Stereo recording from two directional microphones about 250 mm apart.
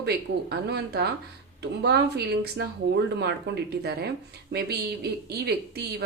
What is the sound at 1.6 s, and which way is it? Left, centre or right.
A woman's voice, right.